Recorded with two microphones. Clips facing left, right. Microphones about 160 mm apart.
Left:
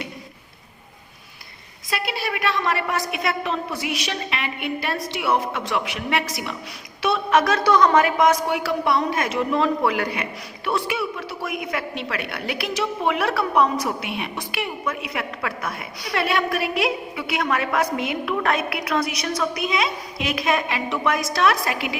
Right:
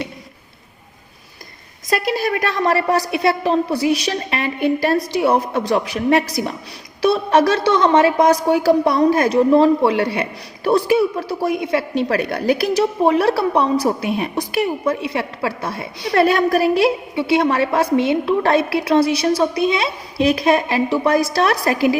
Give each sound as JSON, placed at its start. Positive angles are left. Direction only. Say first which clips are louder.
{"t": 1.9, "sound": "a woman's voice", "louder": "right 8 dB", "side_deg": -45}
{"t": 16.1, "sound": "a woman's voice", "louder": "right 8 dB", "side_deg": -40}